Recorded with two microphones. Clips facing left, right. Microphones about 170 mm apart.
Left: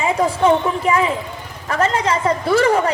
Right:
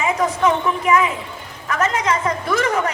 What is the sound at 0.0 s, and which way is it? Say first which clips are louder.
A woman's voice: left 2 dB; 30° left (ahead or behind).